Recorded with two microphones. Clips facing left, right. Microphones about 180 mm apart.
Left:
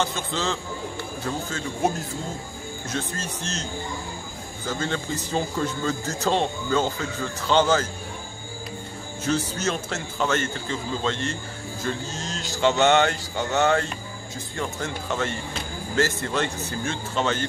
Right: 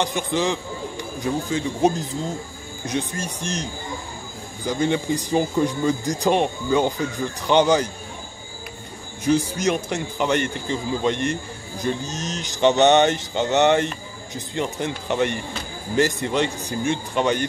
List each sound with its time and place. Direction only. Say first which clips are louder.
0.0 s speech: right 4 dB; 15° right (ahead or behind)
4.6 s speech: right 6 dB; 15° right (ahead or behind)
9.2 s speech: right 5 dB; 15° right (ahead or behind)